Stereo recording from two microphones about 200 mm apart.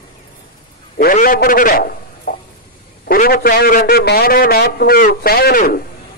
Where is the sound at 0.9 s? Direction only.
45° left (ahead or behind).